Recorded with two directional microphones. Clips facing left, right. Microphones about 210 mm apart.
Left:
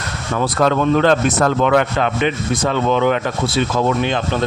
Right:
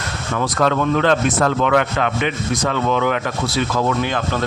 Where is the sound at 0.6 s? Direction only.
35° left (ahead or behind).